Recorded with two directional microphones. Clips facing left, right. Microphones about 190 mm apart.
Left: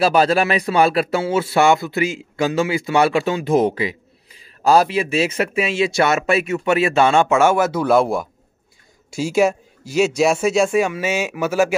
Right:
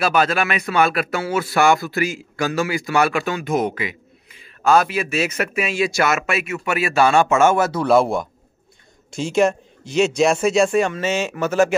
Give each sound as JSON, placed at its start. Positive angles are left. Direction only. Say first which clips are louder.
{"t": 0.0, "sound": "a man's voice", "louder": "left 3 dB", "side_deg": 30}
{"t": 7.7, "sound": "a man's voice", "louder": "even", "side_deg": 0}